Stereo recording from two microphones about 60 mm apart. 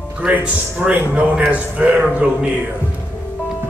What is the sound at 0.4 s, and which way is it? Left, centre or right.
Speech, right.